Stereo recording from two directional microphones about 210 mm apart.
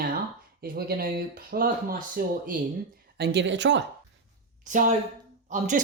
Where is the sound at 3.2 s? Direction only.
55° right (ahead or behind).